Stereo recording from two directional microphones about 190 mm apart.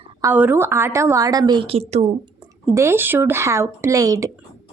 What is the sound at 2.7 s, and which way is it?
Speech, 15° right (ahead or behind).